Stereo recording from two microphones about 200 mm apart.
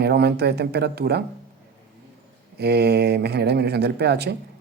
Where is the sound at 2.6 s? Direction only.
55° right (ahead or behind).